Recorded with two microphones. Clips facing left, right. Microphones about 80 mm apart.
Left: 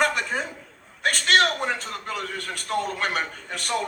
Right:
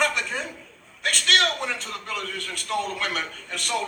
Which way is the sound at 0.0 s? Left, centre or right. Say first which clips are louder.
Left 2 dB; left.